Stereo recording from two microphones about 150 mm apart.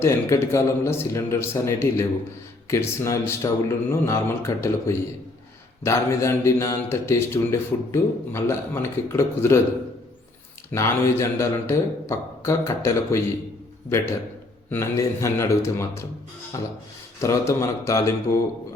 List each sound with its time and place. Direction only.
0.0 s a man's voice: 20° left (ahead or behind)
10.7 s a man's voice: 15° left (ahead or behind)
14.7 s a man's voice: 20° left (ahead or behind)